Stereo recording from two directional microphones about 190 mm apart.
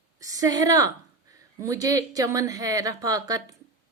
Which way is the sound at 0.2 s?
20° right (ahead or behind).